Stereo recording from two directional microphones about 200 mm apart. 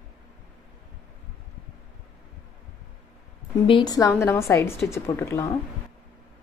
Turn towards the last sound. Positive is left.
turn(degrees=15)  # may be behind; listen again after turning